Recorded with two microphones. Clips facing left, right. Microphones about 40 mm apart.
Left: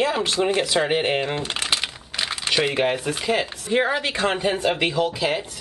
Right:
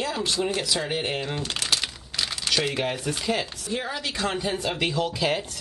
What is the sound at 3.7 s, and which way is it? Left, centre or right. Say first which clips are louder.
Speech: left 9 dB; left.